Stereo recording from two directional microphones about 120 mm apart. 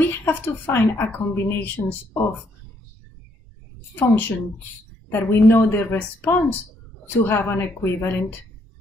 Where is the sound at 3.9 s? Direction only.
15° left (ahead or behind).